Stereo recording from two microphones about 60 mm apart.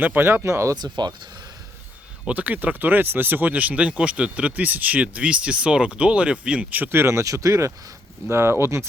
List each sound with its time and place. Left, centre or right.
0.0 s speech: right
2.2 s speech: right
6.9 s speech: right